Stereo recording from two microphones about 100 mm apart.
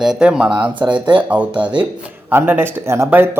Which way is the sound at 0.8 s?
50° right (ahead or behind).